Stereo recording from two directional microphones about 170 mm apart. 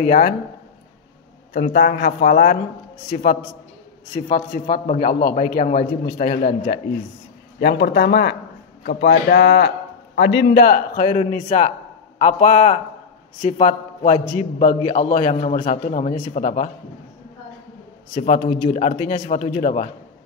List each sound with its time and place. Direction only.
0.0 s a man's voice: 55° left (ahead or behind)
1.5 s a man's voice: 60° left (ahead or behind); by 6.8 s 45° left (ahead or behind)
7.6 s a man's voice: 75° left (ahead or behind)
11.0 s a man's voice: 45° left (ahead or behind)
18.1 s a man's voice: 45° left (ahead or behind)